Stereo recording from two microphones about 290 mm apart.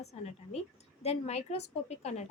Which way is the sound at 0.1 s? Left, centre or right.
Left.